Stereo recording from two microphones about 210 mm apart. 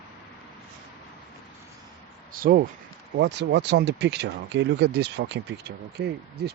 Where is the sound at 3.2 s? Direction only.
55° right (ahead or behind).